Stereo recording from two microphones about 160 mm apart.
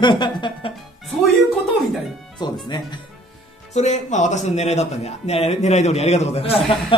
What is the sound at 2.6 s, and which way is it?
Speech, 25° left (ahead or behind).